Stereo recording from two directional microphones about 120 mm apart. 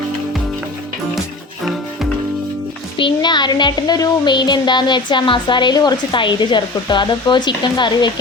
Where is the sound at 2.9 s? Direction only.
40° left (ahead or behind).